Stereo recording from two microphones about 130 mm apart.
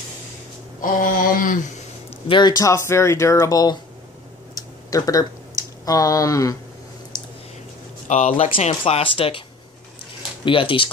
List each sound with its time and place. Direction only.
0.7 s mantra: 90° left
2.2 s speech: 35° left (ahead or behind)
4.6 s a sound: 25° left (ahead or behind)
8.1 s speech: 60° left (ahead or behind); by 9.4 s 40° left (ahead or behind)
10.4 s speech: 40° left (ahead or behind)